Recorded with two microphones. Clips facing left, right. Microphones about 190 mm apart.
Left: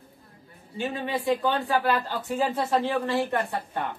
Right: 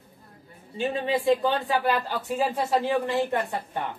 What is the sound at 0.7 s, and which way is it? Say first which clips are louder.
Speech: right 3 dB; 25° right (ahead or behind).